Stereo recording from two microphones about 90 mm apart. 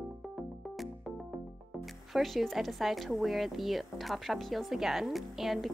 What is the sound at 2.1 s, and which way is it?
Speech, centre (ahead or behind).